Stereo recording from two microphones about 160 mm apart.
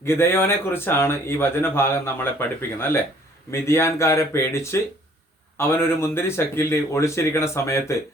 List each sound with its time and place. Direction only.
0.0 s speech: 15° left (ahead or behind)